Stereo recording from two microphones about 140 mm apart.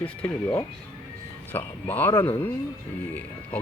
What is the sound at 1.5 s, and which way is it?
Speech, 15° left (ahead or behind).